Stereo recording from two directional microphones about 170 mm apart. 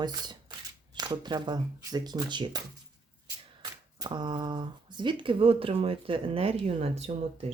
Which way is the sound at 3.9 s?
25° right (ahead or behind).